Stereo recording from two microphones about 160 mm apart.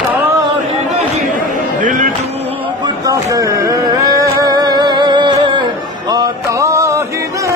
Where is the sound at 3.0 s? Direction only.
20° right (ahead or behind).